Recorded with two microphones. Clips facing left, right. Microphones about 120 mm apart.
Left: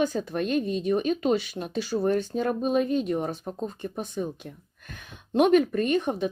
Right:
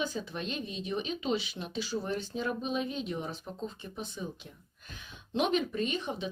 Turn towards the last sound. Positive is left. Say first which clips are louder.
# left 9 dB
turn(degrees=50)  # may be behind; listen again after turning